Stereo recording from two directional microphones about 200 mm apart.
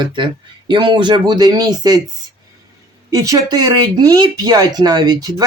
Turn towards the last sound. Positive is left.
turn(degrees=-20)  # may be behind; listen again after turning